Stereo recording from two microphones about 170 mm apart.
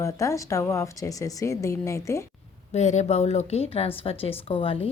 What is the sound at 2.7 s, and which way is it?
A woman's voice, 45° left (ahead or behind).